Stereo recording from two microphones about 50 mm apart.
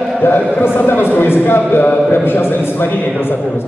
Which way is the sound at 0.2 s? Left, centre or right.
Left.